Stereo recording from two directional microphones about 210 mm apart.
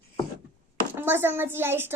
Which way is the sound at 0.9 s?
10° right (ahead or behind).